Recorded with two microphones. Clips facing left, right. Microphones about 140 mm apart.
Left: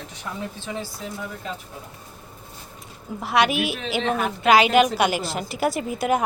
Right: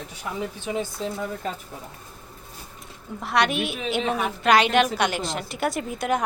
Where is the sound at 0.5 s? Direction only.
15° right (ahead or behind).